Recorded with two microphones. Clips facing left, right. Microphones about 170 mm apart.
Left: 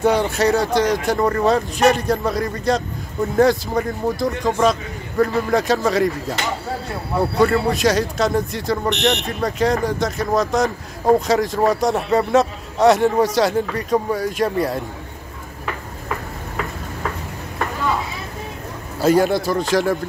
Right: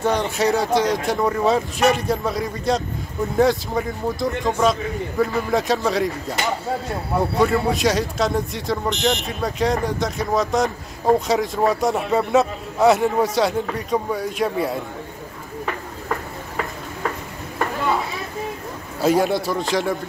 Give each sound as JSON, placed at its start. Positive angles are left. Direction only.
{"t": 0.0, "sound": "speech", "side_deg": 5}
{"t": 7.3, "sound": "speech", "side_deg": 0}
{"t": 8.9, "sound": "speech", "side_deg": 70}
{"t": 9.2, "sound": "speech", "side_deg": 0}
{"t": 18.9, "sound": "speech", "side_deg": 0}